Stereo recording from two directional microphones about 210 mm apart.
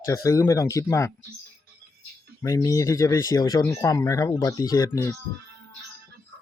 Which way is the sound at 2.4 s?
15° left (ahead or behind).